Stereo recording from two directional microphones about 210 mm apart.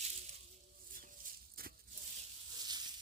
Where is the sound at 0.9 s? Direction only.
40° right (ahead or behind).